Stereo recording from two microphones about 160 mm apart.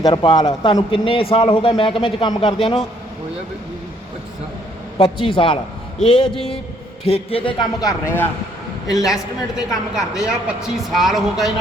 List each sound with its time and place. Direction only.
0.0 s a man's voice: 30° left (ahead or behind)
4.9 s a man's voice: 35° left (ahead or behind)
6.0 s a man's voice: 5° left (ahead or behind)
7.0 s a man's voice: 40° left (ahead or behind); by 8.3 s 15° left (ahead or behind)
9.0 s a man's voice: 5° right (ahead or behind)